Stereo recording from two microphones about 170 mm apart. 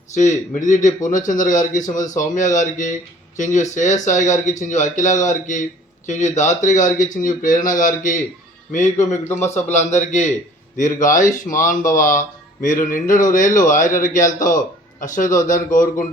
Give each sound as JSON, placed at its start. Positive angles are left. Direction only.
{"t": 0.5, "sound": "a man's voice", "side_deg": 50}